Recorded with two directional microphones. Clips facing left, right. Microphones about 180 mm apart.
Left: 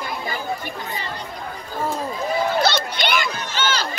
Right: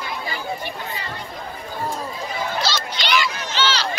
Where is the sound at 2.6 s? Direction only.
55° left (ahead or behind).